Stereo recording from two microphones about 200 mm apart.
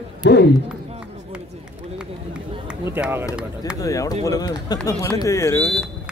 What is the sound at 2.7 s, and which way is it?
Speech, 10° right (ahead or behind).